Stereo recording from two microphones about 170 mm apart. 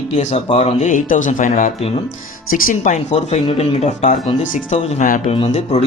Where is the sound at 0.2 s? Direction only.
40° left (ahead or behind).